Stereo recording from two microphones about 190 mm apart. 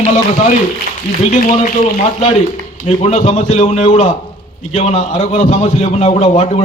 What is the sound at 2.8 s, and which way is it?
A man's voice, 35° left (ahead or behind).